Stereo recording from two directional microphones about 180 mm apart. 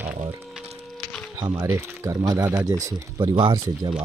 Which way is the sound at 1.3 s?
20° right (ahead or behind).